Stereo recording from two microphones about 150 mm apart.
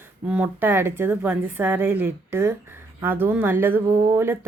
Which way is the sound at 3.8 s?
20° right (ahead or behind).